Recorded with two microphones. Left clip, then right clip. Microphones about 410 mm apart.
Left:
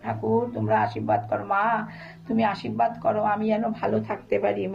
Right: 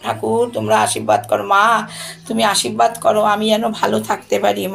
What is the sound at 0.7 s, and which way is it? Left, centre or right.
Speech, left.